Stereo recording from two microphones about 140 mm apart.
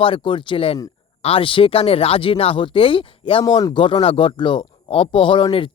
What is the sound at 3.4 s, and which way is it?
Speech, 25° left (ahead or behind).